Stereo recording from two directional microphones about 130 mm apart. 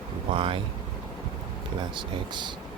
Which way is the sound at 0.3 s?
45° right (ahead or behind).